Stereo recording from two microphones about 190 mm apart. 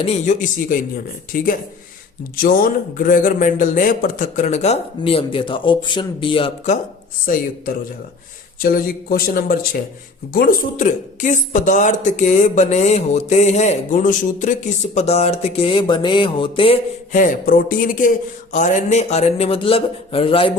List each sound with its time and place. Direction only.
0.0 s a man's voice: 30° left (ahead or behind)
1.3 s a man's voice: 50° left (ahead or behind); by 6.7 s 30° left (ahead or behind)
8.6 s a man's voice: 50° left (ahead or behind)
14.9 s music: 35° left (ahead or behind)
17.1 s a man's voice: 45° left (ahead or behind); by 20.5 s 30° left (ahead or behind)